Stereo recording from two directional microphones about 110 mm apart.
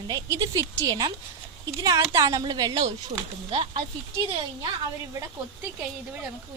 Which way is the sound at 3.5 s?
60° right (ahead or behind).